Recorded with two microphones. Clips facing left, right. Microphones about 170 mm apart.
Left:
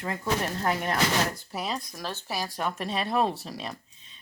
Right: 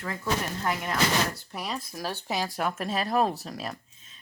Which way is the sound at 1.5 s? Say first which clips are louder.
Left 2 dB; centre (ahead or behind).